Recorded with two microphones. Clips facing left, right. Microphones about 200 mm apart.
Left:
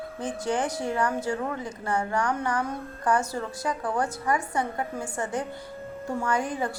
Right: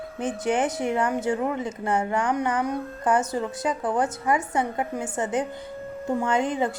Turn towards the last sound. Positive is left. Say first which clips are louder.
# right 4 dB
turn(degrees=-20)  # may be behind; listen again after turning